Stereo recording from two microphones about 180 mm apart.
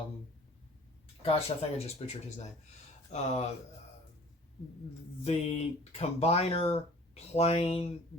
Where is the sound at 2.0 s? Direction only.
35° left (ahead or behind).